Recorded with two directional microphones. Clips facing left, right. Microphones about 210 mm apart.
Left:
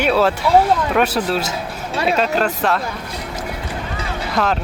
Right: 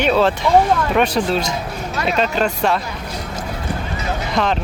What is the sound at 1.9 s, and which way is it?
Speech, 30° left (ahead or behind).